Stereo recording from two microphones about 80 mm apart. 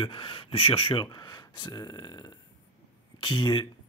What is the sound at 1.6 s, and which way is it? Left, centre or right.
Speech, left.